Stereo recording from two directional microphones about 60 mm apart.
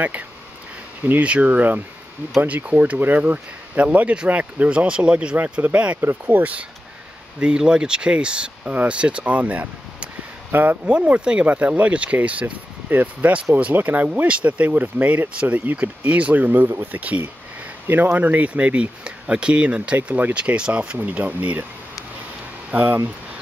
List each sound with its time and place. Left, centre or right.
1.2 s speech: right
7.3 s speech: centre
10.5 s speech: right
10.9 s speech: centre
21.0 s speech: right
22.7 s speech: right